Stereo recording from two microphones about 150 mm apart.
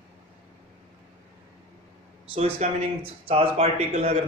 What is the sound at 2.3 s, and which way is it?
A man's voice, 45° right (ahead or behind).